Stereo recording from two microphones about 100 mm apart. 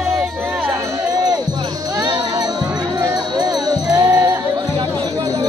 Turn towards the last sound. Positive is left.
turn(degrees=-20)  # may be behind; listen again after turning